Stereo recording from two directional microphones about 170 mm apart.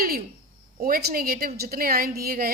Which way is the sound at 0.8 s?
60° right (ahead or behind).